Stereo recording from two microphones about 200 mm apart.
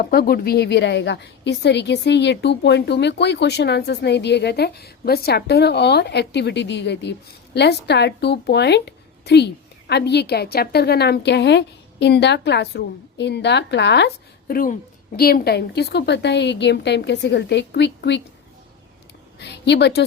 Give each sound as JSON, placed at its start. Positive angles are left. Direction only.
{"t": 0.0, "sound": "a woman's voice", "side_deg": 50}
{"t": 19.4, "sound": "a woman's voice", "side_deg": 60}